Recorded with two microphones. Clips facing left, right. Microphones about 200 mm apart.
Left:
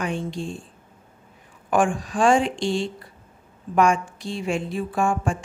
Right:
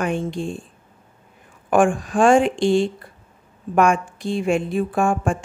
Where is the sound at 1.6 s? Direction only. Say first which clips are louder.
Right 4 dB; 50° right (ahead or behind).